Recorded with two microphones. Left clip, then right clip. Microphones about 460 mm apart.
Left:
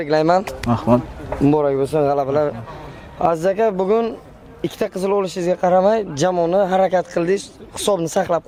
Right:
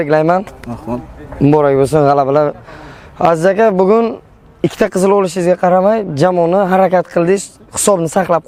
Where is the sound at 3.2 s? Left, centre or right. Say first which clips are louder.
Right 7 dB; right.